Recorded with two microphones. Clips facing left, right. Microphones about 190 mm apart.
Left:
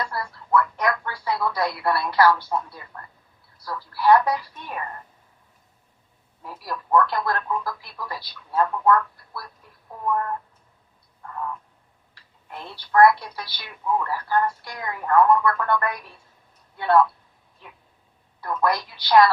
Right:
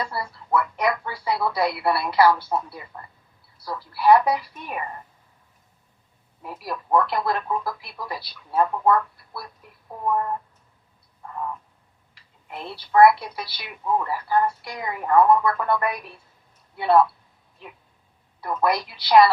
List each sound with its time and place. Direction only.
0.3 s a sound: 15° right (ahead or behind)
1.5 s a woman's voice: 15° right (ahead or behind)
6.4 s a woman's voice: 15° right (ahead or behind)
11.2 s frog: 15° right (ahead or behind)
12.5 s a woman's voice: 15° right (ahead or behind)
18.4 s a woman's voice: 20° right (ahead or behind)